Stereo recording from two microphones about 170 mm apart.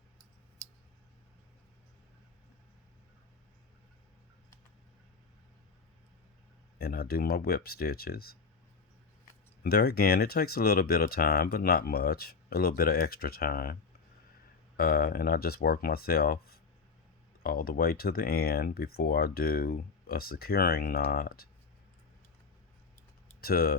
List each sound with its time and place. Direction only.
6.7 s speech: 65° left (ahead or behind)
9.6 s speech: 65° left (ahead or behind)
14.8 s speech: 60° left (ahead or behind)
23.4 s speech: 65° left (ahead or behind)